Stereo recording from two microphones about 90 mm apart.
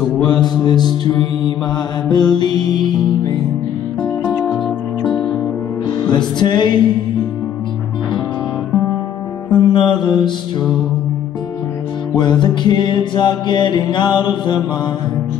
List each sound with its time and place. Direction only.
0.3 s music: 55° left (ahead or behind)
6.0 s music: 55° left (ahead or behind)
9.5 s mantra: 60° left (ahead or behind)
12.2 s music: 60° left (ahead or behind)